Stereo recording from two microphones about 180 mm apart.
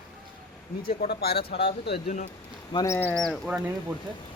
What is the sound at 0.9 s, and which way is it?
Speech, 60° left (ahead or behind).